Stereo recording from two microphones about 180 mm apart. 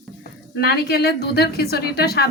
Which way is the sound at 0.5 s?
60° left (ahead or behind).